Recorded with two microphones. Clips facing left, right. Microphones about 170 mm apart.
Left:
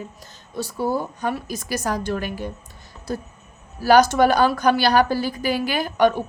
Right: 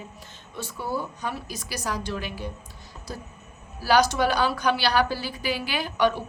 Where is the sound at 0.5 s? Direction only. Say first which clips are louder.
Left 7 dB; 40° left (ahead or behind).